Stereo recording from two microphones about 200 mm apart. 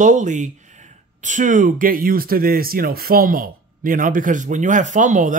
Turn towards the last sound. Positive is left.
turn(degrees=-40)  # may be behind; listen again after turning